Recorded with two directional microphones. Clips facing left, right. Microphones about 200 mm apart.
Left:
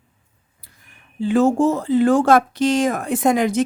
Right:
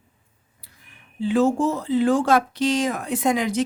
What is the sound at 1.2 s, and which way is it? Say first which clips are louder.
Speech: left 3 dB; 45° left (ahead or behind).